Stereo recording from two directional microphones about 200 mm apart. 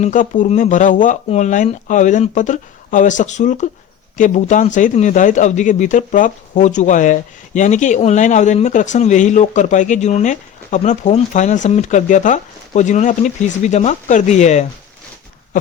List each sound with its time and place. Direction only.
0.0 s a man's voice: 40° left (ahead or behind)